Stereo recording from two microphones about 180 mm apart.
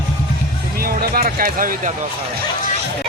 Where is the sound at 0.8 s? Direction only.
55° right (ahead or behind).